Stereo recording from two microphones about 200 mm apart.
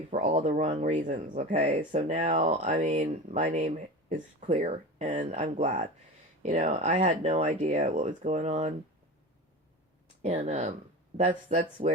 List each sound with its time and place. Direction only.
0.1 s speech: 35° right (ahead or behind)
10.2 s speech: 35° right (ahead or behind)